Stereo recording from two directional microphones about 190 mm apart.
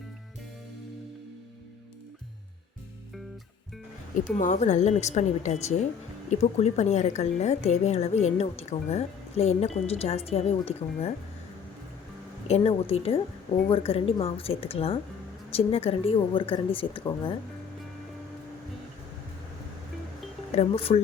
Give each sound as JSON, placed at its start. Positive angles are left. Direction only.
{"t": 4.2, "sound": "a woman's voice", "side_deg": 40}
{"t": 12.5, "sound": "a woman's voice", "side_deg": 35}
{"t": 20.6, "sound": "a woman's voice", "side_deg": 30}